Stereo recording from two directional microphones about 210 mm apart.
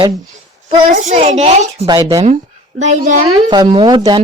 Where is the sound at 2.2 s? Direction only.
35° right (ahead or behind).